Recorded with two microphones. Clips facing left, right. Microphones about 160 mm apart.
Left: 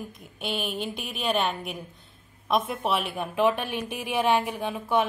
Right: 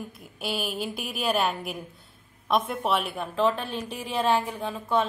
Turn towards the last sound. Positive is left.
turn(degrees=15)  # may be behind; listen again after turning